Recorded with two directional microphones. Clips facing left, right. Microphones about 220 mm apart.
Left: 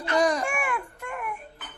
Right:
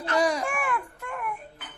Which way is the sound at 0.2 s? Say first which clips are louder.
Left 1 dB; 5° right (ahead or behind).